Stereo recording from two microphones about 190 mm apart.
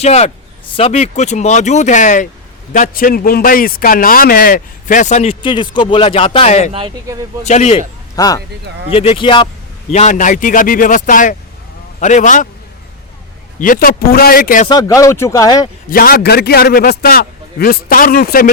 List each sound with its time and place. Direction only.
0.0 s a man's voice: 35° left (ahead or behind)
8.1 s speech: 20° left (ahead or behind)
8.9 s speech: 30° left (ahead or behind)
9.9 s a man's voice: 40° left (ahead or behind)
13.6 s a man's voice: 45° left (ahead or behind)
14.7 s speech: 20° left (ahead or behind)
15.9 s a man's voice: 50° left (ahead or behind)